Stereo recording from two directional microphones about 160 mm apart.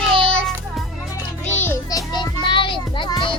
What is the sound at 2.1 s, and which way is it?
Children playing, 30° left (ahead or behind).